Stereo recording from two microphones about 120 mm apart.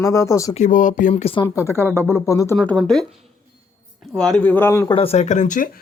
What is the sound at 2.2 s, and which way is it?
Speech, 25° left (ahead or behind).